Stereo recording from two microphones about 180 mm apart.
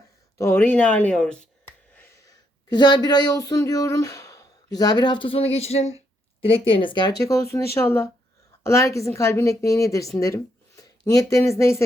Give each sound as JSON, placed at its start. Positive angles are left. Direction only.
{"t": 0.3, "sound": "a woman's voice", "side_deg": 15}